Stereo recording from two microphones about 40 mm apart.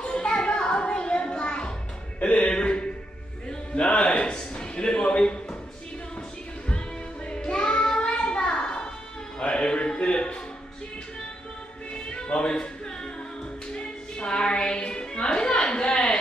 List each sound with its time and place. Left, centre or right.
0.0 s music: left
3.4 s a sound: left
7.2 s music: left
11.9 s music: left
13.7 s music: left